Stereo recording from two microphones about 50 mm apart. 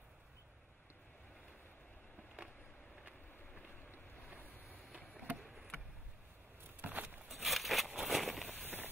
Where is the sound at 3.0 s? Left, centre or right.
Right.